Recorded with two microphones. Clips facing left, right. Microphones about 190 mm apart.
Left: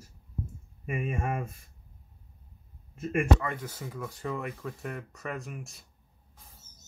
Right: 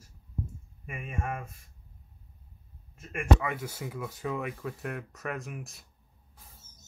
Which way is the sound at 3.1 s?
Centre (ahead or behind).